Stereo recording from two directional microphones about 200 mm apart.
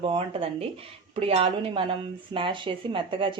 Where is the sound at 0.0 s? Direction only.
25° right (ahead or behind).